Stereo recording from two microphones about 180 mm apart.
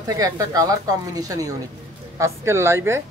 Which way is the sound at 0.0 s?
20° right (ahead or behind).